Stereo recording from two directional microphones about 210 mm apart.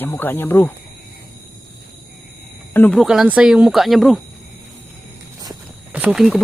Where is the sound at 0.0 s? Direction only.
10° left (ahead or behind).